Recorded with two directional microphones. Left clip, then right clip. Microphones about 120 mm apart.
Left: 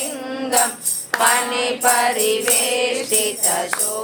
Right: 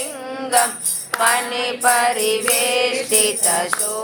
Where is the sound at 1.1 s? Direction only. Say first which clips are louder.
Left 1 dB; centre (ahead or behind).